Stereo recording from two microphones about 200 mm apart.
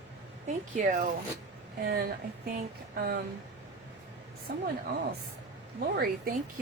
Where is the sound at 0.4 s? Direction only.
40° right (ahead or behind).